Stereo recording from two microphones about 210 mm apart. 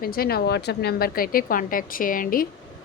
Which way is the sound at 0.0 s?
45° left (ahead or behind).